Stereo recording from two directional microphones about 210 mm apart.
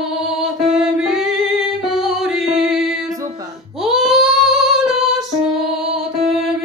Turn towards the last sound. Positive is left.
turn(degrees=0)  # may be behind; listen again after turning